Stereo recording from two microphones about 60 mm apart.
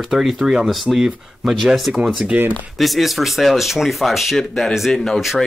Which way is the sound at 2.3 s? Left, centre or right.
Right.